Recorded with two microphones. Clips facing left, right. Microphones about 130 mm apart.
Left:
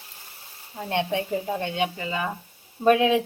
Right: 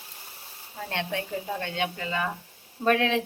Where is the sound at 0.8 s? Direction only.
20° left (ahead or behind).